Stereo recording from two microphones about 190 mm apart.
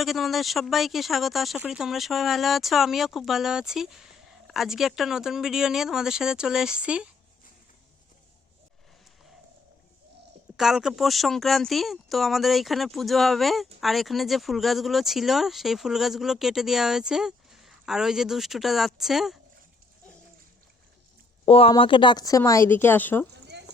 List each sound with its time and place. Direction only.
0.0 s speech: centre (ahead or behind)
10.6 s speech: centre (ahead or behind)
21.4 s speech: 30° left (ahead or behind); by 23.2 s 10° left (ahead or behind)
23.5 s clip-clop: 65° right (ahead or behind)